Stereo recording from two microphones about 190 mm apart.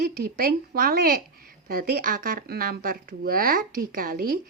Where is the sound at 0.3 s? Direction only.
50° right (ahead or behind).